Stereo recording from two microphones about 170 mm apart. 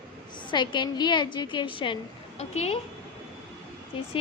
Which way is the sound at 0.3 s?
25° left (ahead or behind).